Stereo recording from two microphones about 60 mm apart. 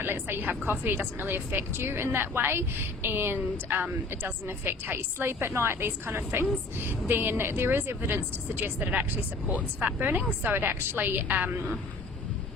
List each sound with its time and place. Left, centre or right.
0.0 s a woman's voice: right